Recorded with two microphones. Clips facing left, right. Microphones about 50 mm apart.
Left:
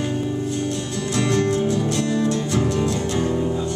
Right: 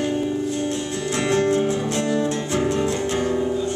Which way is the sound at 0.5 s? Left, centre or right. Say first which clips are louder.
Even; right.